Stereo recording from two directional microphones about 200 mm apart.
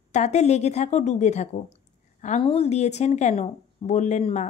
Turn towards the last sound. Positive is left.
turn(degrees=35)  # may be behind; listen again after turning